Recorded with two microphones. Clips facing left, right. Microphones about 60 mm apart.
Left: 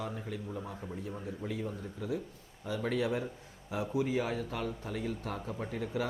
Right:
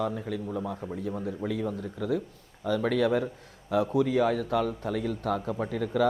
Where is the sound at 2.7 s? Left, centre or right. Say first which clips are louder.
Right 7 dB; right.